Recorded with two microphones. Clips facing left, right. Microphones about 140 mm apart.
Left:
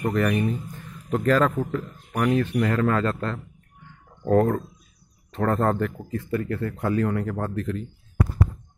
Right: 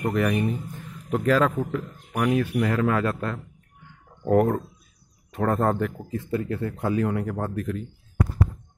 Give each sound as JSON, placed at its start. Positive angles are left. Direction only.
{"t": 0.0, "sound": "speech", "side_deg": -10}
{"t": 1.1, "sound": "speech", "side_deg": -5}
{"t": 5.9, "sound": "speech", "side_deg": -15}